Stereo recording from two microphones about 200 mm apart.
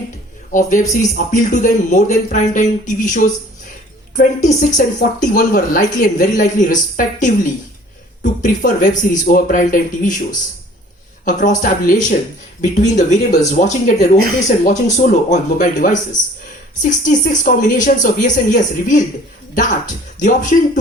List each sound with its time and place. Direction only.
0.5 s speech: 40° left (ahead or behind)
4.6 s a woman's voice: 45° left (ahead or behind)
11.3 s speech: 40° left (ahead or behind)